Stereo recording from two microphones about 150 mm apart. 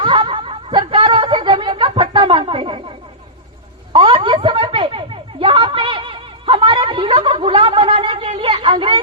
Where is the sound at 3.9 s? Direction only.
35° right (ahead or behind).